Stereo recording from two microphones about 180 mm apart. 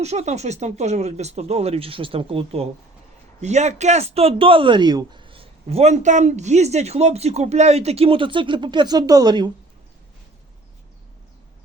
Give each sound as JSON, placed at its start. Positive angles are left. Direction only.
{"t": 0.0, "sound": "speech", "side_deg": -40}